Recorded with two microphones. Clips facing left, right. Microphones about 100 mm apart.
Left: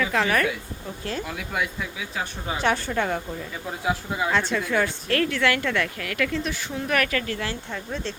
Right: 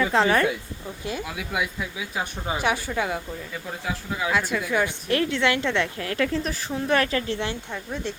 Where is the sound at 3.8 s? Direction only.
10° left (ahead or behind).